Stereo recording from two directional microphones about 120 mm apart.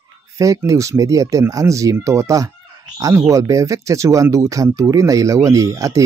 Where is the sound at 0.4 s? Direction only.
25° right (ahead or behind).